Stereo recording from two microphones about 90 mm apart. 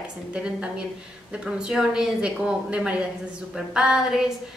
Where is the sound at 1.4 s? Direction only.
5° right (ahead or behind).